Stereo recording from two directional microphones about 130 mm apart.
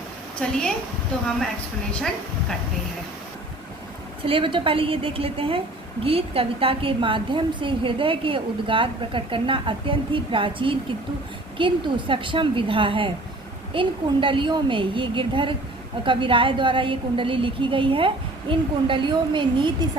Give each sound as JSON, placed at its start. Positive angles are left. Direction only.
{"t": 0.3, "sound": "a woman's voice", "side_deg": 5}
{"t": 1.9, "sound": "a woman's voice", "side_deg": 5}
{"t": 4.2, "sound": "a woman's voice", "side_deg": -45}